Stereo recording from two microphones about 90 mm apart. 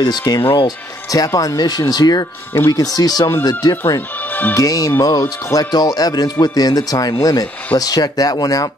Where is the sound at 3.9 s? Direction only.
20° left (ahead or behind).